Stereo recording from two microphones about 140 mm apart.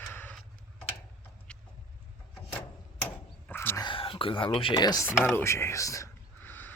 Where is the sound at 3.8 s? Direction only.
35° left (ahead or behind).